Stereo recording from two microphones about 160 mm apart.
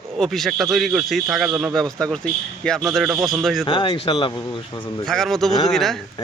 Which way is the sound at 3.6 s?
30° left (ahead or behind).